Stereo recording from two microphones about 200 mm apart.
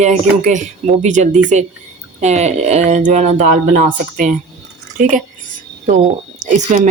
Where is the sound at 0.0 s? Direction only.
35° right (ahead or behind).